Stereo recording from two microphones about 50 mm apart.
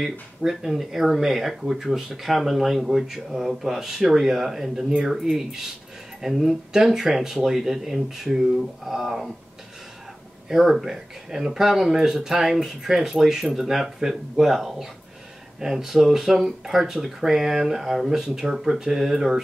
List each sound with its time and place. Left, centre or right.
0.0 s speech: centre
10.5 s speech: centre